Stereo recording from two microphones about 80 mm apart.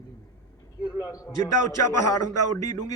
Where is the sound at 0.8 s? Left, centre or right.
Left.